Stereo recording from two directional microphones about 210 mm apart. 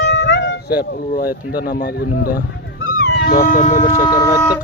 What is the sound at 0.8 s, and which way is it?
Speech, 45° left (ahead or behind).